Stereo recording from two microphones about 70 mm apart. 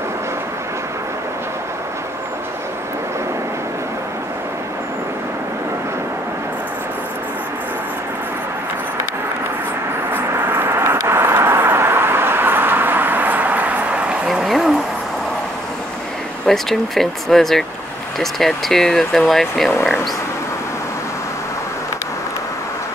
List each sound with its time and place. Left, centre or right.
10.3 s vehicle: right
14.2 s a sound: centre
16.4 s speech: centre